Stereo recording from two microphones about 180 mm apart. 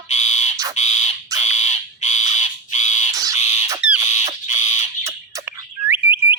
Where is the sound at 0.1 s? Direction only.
40° left (ahead or behind).